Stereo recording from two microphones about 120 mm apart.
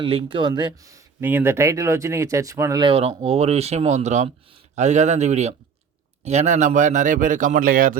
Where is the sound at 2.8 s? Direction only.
50° right (ahead or behind); by 7.5 s 90° right.